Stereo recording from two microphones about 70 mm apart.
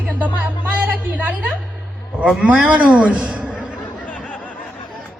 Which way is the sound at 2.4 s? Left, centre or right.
Centre.